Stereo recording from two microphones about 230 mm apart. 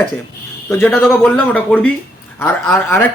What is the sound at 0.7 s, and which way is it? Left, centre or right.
Speech, centre.